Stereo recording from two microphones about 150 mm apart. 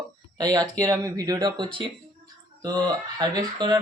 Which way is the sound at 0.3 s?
25° right (ahead or behind).